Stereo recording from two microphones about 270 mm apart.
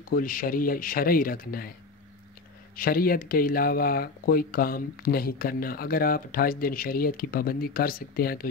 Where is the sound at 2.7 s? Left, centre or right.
Left.